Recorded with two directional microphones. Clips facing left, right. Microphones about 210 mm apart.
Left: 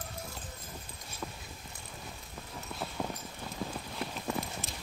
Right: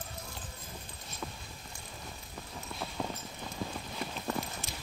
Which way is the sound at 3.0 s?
5° left (ahead or behind).